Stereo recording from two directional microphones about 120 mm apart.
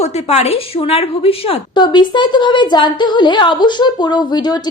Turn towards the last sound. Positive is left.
turn(degrees=35)  # may be behind; listen again after turning